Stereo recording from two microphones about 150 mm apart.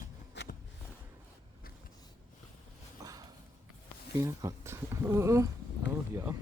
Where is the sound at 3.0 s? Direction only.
25° right (ahead or behind).